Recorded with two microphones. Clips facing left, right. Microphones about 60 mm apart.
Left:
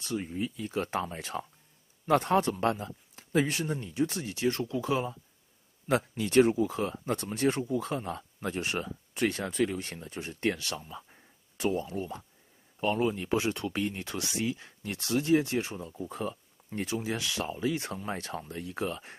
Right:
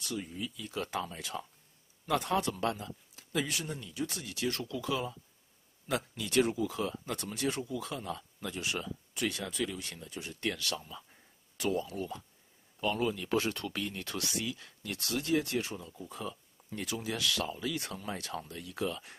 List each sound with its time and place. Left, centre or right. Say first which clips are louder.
0.0 s speech: left 5 dB; left
10.9 s a sound: left 4 dB; left
12.8 s speech: left 4 dB; left